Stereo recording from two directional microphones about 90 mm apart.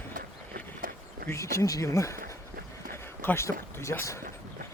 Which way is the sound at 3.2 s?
30° left (ahead or behind).